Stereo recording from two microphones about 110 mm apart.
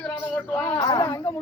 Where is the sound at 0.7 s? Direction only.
35° left (ahead or behind).